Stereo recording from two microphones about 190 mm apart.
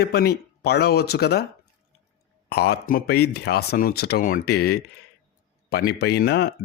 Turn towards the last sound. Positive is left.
turn(degrees=60)  # may be behind; listen again after turning